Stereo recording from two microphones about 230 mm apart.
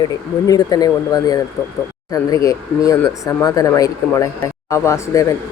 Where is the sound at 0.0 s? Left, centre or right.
Centre.